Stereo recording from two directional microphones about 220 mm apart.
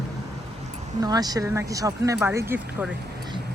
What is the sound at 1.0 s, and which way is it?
Speech, 15° right (ahead or behind).